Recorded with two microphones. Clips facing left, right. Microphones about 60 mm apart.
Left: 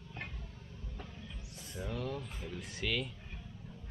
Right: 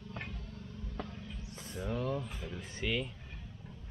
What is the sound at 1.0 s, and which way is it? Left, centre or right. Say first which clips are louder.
Music: right 8 dB; right.